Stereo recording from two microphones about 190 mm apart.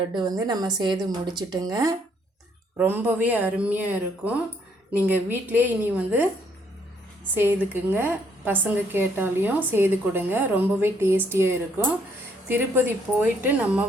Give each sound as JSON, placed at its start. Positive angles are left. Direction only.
{"t": 0.1, "sound": "a woman's voice", "side_deg": -20}
{"t": 7.3, "sound": "a woman's voice", "side_deg": -10}